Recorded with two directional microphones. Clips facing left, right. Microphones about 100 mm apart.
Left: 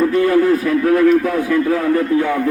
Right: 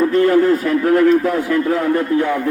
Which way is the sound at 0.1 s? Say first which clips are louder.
Right 1 dB; 25° right (ahead or behind).